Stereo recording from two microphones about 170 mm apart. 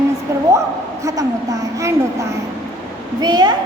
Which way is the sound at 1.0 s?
20° right (ahead or behind).